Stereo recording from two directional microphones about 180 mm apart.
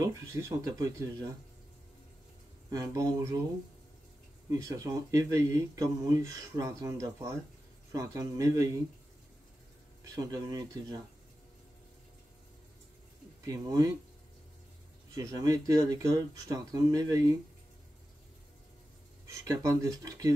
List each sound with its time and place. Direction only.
0.0 s speech: 15° right (ahead or behind)
2.7 s speech: 20° right (ahead or behind)
4.5 s speech: 20° right (ahead or behind)
10.0 s speech: 20° right (ahead or behind)
13.4 s speech: 20° right (ahead or behind)
15.1 s speech: 20° right (ahead or behind)
19.2 s speech: 20° right (ahead or behind)